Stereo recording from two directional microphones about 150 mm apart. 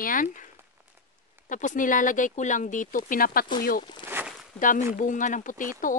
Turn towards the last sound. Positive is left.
turn(degrees=65)  # may be behind; listen again after turning